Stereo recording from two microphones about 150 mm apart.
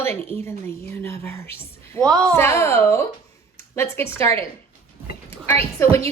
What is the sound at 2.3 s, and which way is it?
A woman's voice, 20° left (ahead or behind).